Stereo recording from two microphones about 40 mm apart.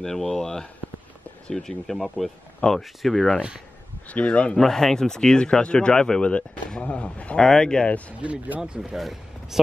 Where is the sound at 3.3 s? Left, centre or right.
Right.